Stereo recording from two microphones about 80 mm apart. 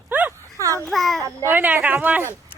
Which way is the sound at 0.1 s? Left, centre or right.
Right.